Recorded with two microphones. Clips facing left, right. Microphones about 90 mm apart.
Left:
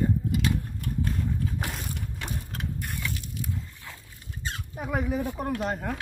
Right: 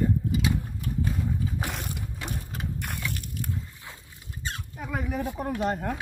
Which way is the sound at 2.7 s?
65° right (ahead or behind).